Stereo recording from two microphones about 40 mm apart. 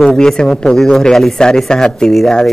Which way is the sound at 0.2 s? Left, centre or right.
Centre.